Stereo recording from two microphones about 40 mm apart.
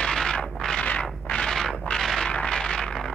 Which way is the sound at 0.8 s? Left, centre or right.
Left.